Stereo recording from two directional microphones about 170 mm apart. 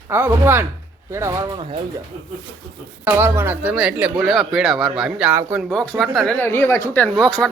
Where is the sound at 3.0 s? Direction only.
15° right (ahead or behind).